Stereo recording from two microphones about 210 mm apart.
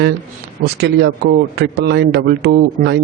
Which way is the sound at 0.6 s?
50° right (ahead or behind).